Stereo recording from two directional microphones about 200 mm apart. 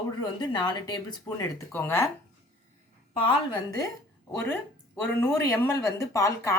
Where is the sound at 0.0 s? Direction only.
20° left (ahead or behind).